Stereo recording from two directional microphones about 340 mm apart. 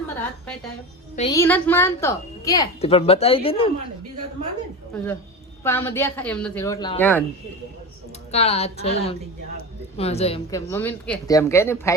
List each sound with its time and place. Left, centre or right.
0.2 s a woman's voice: centre
1.1 s a woman's voice: centre
5.6 s speech: centre
8.3 s a woman's voice: centre